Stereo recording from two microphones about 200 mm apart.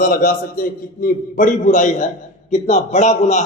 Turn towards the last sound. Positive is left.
turn(degrees=35)  # may be behind; listen again after turning